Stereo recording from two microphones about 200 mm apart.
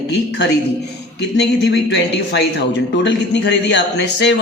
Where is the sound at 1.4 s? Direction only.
60° left (ahead or behind).